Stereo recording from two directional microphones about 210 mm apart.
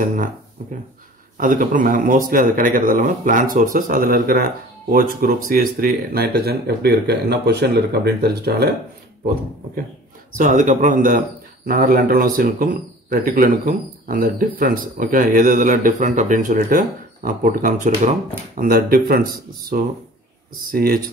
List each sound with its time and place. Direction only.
0.0 s speech: 40° right (ahead or behind)
1.4 s speech: 40° right (ahead or behind)
10.3 s speech: 40° right (ahead or behind)
20.7 s speech: 45° right (ahead or behind)